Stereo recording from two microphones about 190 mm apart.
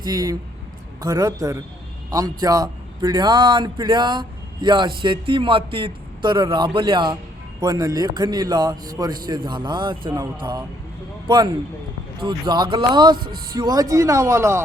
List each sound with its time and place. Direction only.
0.0 s a man's voice: 20° right (ahead or behind)
13.1 s speech: 50° right (ahead or behind)
13.6 s speech: 20° right (ahead or behind)